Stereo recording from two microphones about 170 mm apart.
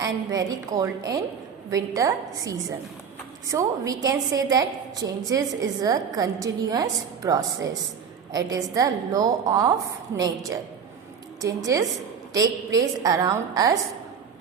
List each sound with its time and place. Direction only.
0.0 s a woman's voice: 20° right (ahead or behind)